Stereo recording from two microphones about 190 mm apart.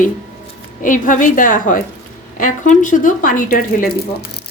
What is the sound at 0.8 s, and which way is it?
Speech, 45° left (ahead or behind).